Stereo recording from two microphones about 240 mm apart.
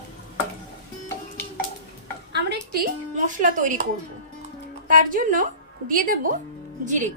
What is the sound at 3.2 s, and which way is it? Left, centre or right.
Speech, right.